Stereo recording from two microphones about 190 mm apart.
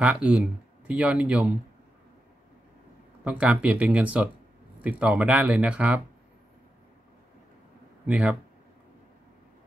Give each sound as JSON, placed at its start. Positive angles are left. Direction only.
{"t": 0.0, "sound": "speech", "side_deg": -5}
{"t": 3.3, "sound": "speech", "side_deg": -5}
{"t": 8.1, "sound": "speech", "side_deg": -5}